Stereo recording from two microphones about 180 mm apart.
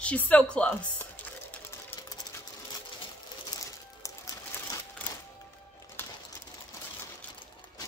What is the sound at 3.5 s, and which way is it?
Music, 20° left (ahead or behind).